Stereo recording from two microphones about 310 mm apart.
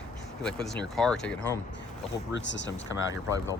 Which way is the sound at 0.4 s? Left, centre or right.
Centre.